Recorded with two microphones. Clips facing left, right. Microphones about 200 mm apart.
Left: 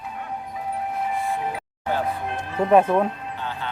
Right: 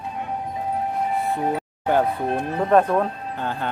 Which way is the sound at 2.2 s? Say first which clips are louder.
Right 6 dB; 35° right (ahead or behind).